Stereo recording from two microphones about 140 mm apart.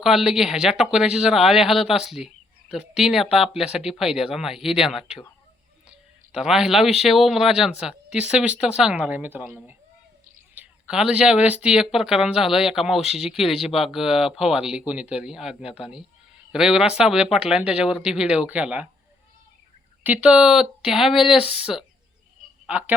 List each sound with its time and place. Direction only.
0.0 s speech: centre (ahead or behind)
6.3 s speech: 5° right (ahead or behind)
20.1 s speech: 10° right (ahead or behind)
21.3 s speech: 45° left (ahead or behind)
21.6 s speech: 5° right (ahead or behind)